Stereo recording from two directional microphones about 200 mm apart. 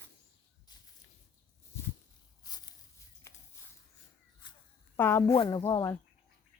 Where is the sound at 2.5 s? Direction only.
20° left (ahead or behind).